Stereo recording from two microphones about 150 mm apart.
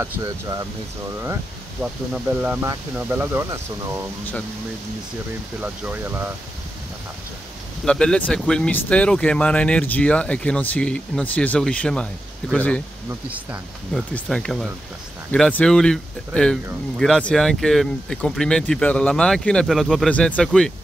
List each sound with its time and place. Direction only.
0.0 s speech: 25° right (ahead or behind)
1.8 s speech: 5° right (ahead or behind)
5.6 s speech: 10° right (ahead or behind)
7.8 s speech: 5° left (ahead or behind)
13.9 s speech: 5° left (ahead or behind)